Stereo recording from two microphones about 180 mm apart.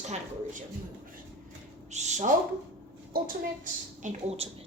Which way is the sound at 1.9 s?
40° right (ahead or behind).